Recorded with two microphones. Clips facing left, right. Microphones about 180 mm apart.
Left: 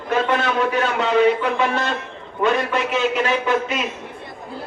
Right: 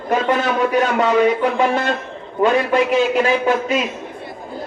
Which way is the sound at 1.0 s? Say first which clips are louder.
Even; 45° right (ahead or behind).